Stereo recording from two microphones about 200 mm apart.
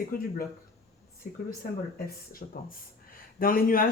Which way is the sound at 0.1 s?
45° left (ahead or behind).